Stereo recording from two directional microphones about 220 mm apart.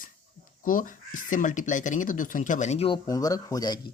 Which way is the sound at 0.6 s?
40° left (ahead or behind).